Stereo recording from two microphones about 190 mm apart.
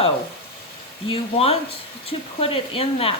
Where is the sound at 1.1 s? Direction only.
30° left (ahead or behind).